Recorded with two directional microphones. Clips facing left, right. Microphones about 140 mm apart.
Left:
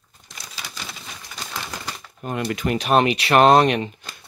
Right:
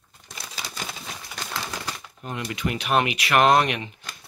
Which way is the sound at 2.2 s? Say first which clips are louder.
Left 5 dB; 55° left (ahead or behind).